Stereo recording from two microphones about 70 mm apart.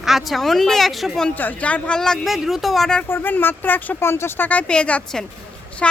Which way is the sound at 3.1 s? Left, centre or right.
Left.